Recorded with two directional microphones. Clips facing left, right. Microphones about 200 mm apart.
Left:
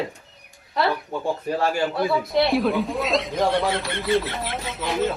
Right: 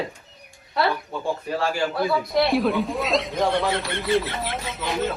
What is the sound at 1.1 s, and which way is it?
Speech, 15° left (ahead or behind).